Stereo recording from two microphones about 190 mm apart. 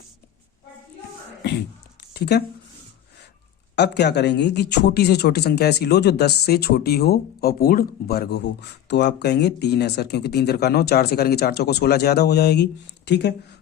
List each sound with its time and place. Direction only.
2.1 s speech: 60° left (ahead or behind)
3.8 s speech: 65° left (ahead or behind)